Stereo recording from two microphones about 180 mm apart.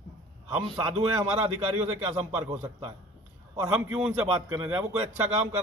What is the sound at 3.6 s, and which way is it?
A man's voice, 10° right (ahead or behind).